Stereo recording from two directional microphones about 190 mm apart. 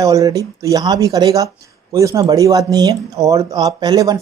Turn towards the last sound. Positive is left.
turn(degrees=-20)  # may be behind; listen again after turning